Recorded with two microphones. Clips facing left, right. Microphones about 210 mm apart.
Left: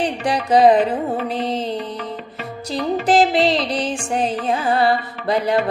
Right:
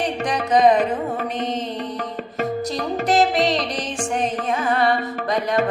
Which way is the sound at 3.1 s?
30° left (ahead or behind).